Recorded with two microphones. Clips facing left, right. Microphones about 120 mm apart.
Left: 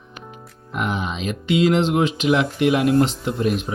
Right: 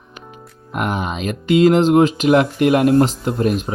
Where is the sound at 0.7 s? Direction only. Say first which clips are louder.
Right 3 dB; 50° right (ahead or behind).